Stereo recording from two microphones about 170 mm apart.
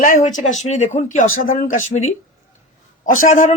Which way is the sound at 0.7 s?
45° left (ahead or behind).